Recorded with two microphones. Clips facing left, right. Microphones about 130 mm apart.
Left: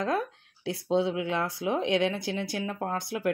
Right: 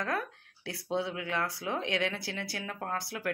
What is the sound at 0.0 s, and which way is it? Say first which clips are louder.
Speech: left 5 dB; 20° left (ahead or behind).